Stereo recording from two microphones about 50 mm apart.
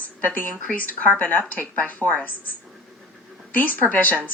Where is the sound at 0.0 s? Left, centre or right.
Left.